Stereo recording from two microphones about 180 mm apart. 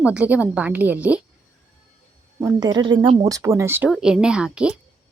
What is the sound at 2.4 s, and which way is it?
Speech, 20° right (ahead or behind).